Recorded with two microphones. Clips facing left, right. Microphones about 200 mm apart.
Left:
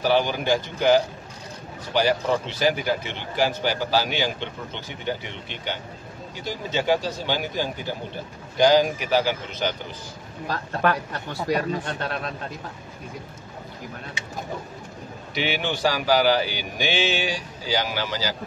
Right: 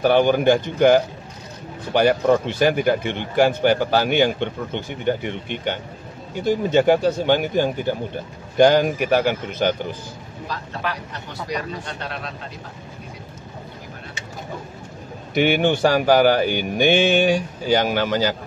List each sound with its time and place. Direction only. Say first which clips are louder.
0.0 s speech: right 6 dB; 55° right (ahead or behind)
10.5 s speech: left 5 dB; 50° left (ahead or behind)
15.3 s speech: right 9 dB; 50° right (ahead or behind)